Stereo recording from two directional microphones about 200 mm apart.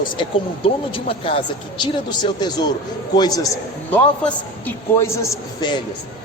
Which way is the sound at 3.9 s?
10° left (ahead or behind).